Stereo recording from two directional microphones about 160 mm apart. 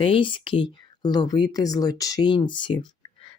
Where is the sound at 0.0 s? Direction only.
35° left (ahead or behind).